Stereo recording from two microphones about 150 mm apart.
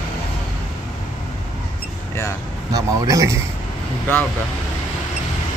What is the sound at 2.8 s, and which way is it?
Speech, 20° right (ahead or behind).